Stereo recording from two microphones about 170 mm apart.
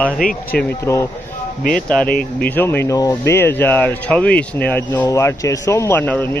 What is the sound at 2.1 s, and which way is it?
Speech, 60° left (ahead or behind).